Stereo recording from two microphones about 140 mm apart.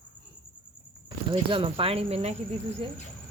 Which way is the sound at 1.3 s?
40° right (ahead or behind).